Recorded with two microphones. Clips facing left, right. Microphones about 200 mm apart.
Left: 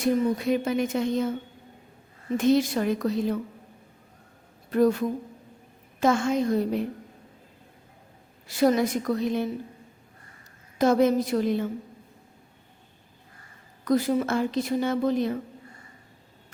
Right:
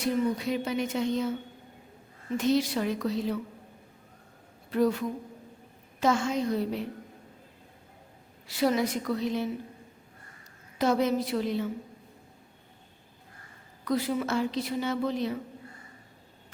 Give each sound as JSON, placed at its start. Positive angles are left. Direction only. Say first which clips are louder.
{"t": 0.0, "sound": "speech", "louder": "left 4 dB", "side_deg": 50}
{"t": 2.4, "sound": "speech", "louder": "left 4 dB", "side_deg": 50}
{"t": 4.7, "sound": "speech", "louder": "left 4 dB", "side_deg": 50}
{"t": 8.4, "sound": "speech", "louder": "left 4 dB", "side_deg": 45}
{"t": 10.8, "sound": "speech", "louder": "left 5 dB", "side_deg": 50}
{"t": 13.8, "sound": "speech", "louder": "left 5 dB", "side_deg": 45}